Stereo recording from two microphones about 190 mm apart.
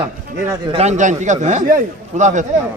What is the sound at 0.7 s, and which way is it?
A man's voice, 35° right (ahead or behind).